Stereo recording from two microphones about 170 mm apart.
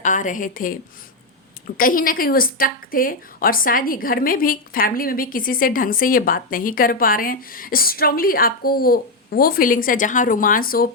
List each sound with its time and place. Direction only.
0.0 s a woman's voice: 50° left (ahead or behind)